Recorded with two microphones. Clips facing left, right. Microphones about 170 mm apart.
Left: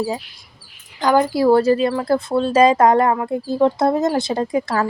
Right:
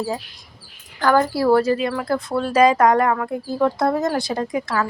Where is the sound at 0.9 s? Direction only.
15° left (ahead or behind).